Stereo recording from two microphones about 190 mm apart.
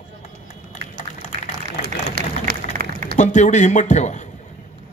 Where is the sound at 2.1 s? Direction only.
50° right (ahead or behind).